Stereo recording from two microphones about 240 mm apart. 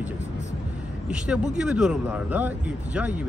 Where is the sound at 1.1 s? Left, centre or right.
Centre.